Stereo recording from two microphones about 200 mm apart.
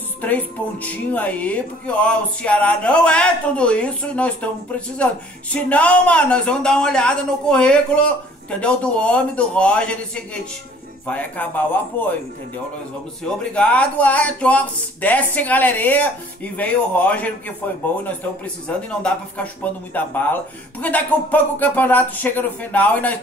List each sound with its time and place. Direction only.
0.2 s speech: 10° left (ahead or behind)
13.4 s speech: 5° left (ahead or behind)